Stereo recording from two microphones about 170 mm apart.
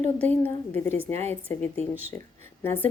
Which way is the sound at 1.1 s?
40° right (ahead or behind).